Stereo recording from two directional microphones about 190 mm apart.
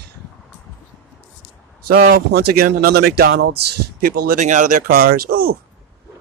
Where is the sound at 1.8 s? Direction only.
50° right (ahead or behind).